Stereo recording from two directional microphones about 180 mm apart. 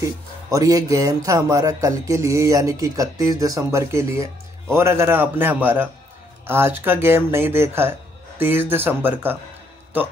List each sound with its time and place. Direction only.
0.5 s speech: 20° right (ahead or behind)